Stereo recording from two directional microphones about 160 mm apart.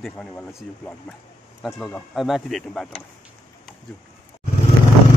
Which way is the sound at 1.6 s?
Centre (ahead or behind).